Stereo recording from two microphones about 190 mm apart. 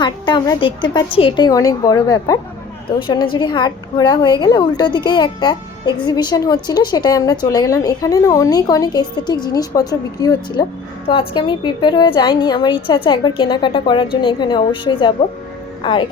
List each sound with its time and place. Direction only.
0.0 s a woman's voice: 20° left (ahead or behind)